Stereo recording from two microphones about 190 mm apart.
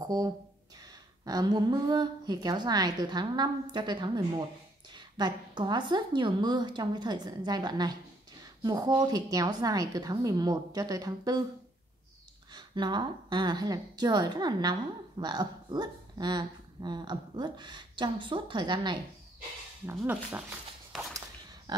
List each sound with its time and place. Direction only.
0.0 s a woman's voice: 20° right (ahead or behind)
12.5 s a woman's voice: 25° right (ahead or behind)
20.0 s speech: 5° right (ahead or behind)
21.7 s a sound: 20° right (ahead or behind)